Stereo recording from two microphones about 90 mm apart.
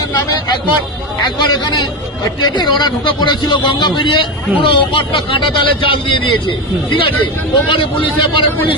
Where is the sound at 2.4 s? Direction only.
50° left (ahead or behind).